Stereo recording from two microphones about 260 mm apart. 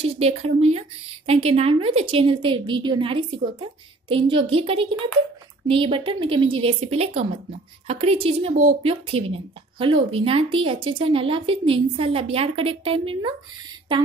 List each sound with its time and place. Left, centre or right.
0.0 s speech: right